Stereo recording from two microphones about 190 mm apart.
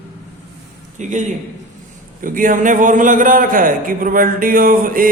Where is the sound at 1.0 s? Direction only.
40° right (ahead or behind).